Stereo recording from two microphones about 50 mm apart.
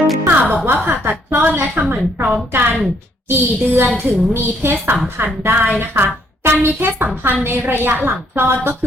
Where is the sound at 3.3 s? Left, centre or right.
Right.